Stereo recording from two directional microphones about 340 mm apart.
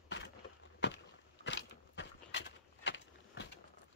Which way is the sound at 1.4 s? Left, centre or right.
Left.